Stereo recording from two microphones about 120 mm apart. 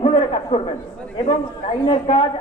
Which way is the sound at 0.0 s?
50° left (ahead or behind).